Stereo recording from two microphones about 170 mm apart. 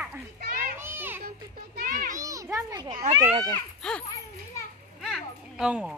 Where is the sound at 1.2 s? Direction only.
60° right (ahead or behind).